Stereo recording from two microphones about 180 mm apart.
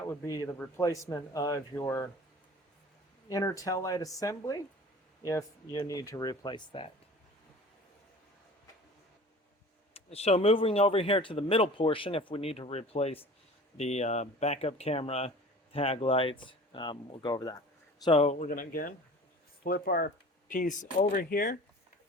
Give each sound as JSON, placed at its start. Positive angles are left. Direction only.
{"t": 0.1, "sound": "speech", "side_deg": 20}
{"t": 3.2, "sound": "speech", "side_deg": 20}
{"t": 9.9, "sound": "speech", "side_deg": 35}
{"t": 18.0, "sound": "speech", "side_deg": 35}